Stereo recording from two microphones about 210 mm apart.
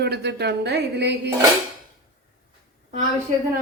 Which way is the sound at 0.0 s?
50° right (ahead or behind).